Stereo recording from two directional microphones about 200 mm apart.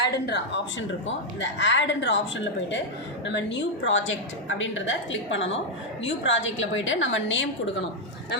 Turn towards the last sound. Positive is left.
turn(degrees=70)  # may be behind; listen again after turning